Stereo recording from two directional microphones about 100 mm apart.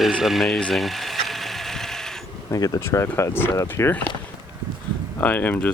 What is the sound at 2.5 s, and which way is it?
Speech, 35° left (ahead or behind).